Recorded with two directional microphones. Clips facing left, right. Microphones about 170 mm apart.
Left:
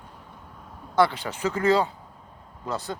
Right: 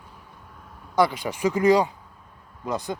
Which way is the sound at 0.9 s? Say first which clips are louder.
Even; 10° right (ahead or behind).